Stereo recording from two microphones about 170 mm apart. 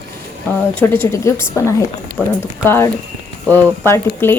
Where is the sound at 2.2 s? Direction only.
10° right (ahead or behind).